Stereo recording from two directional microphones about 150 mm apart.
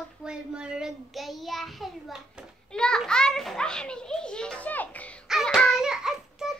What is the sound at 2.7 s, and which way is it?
A child's voice, 5° left (ahead or behind).